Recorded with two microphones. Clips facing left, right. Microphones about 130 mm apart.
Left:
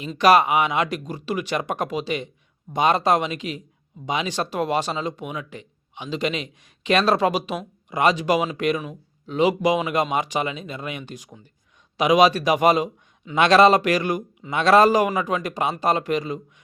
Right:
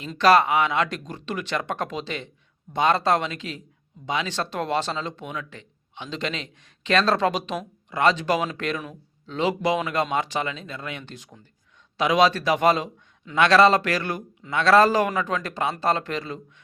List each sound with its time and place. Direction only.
0.2 s speech: 15° left (ahead or behind)